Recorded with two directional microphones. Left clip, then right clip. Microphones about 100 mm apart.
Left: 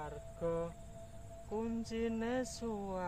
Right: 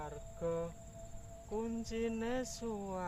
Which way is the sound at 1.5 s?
20° right (ahead or behind).